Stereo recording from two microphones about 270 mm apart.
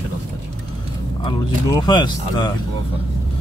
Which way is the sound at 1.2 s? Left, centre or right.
Centre.